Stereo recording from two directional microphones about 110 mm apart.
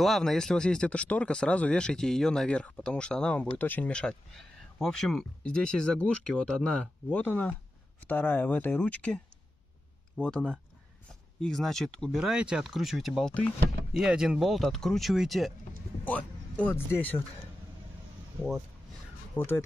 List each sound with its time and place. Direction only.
0.0 s speech: centre (ahead or behind)
12.2 s speech: 5° right (ahead or behind)
16.1 s speech: 10° left (ahead or behind)
19.3 s speech: 20° left (ahead or behind)